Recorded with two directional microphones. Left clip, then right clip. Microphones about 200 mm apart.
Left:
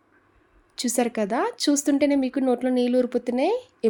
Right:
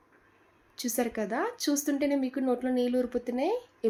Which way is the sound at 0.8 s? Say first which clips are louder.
Left 7 dB; 50° left (ahead or behind).